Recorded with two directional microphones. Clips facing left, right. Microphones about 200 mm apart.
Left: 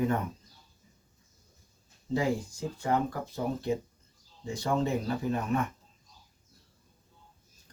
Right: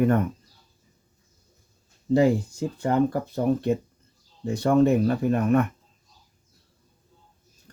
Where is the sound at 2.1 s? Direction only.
60° right (ahead or behind).